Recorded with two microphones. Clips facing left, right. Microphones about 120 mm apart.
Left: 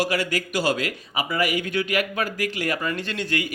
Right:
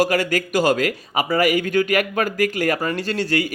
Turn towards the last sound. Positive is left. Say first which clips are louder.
# right 6 dB
turn(degrees=-40)  # may be behind; listen again after turning